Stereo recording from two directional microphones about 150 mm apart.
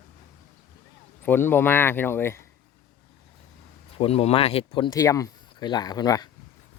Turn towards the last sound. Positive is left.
turn(degrees=25)  # may be behind; listen again after turning